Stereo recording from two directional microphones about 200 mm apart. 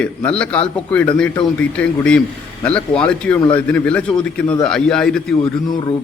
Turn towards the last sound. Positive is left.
turn(degrees=20)  # may be behind; listen again after turning